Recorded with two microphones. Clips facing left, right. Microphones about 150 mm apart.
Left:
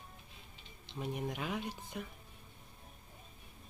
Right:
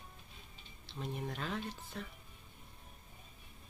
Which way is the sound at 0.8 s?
10° left (ahead or behind).